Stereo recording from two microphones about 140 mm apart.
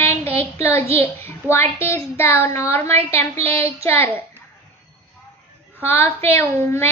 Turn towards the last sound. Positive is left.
turn(degrees=20)  # may be behind; listen again after turning